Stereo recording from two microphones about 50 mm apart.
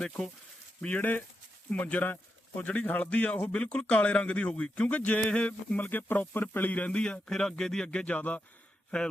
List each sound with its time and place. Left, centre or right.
0.8 s speech: left
5.7 s speech: left
7.0 s speech: centre
7.9 s speech: left
8.9 s speech: centre